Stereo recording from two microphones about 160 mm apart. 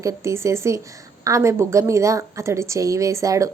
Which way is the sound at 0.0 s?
20° right (ahead or behind).